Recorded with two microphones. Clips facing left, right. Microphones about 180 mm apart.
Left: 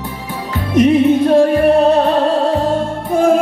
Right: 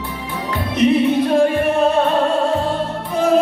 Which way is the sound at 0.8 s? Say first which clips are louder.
Left 5 dB; 50° left (ahead or behind).